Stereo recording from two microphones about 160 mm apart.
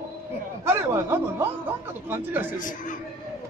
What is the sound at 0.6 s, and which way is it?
Speech, 15° right (ahead or behind).